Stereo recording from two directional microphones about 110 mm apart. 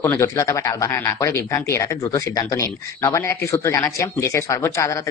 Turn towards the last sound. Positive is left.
turn(degrees=25)  # may be behind; listen again after turning